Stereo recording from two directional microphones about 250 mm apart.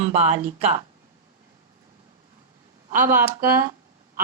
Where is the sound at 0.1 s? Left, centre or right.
Right.